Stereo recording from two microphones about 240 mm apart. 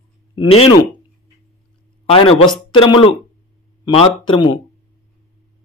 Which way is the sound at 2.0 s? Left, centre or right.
Left.